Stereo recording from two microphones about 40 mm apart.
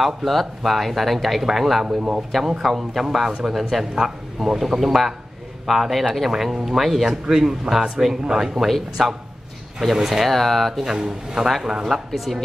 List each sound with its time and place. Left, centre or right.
0.0 s speech: centre
2.0 s speech: right
2.6 s speech: centre
7.2 s speech: centre
8.5 s speech: centre
9.9 s speech: centre
10.2 s speech: centre
12.3 s speech: centre